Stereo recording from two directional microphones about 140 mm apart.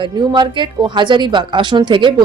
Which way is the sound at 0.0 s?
35° right (ahead or behind).